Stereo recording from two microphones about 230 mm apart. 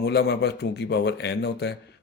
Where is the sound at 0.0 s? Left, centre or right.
Left.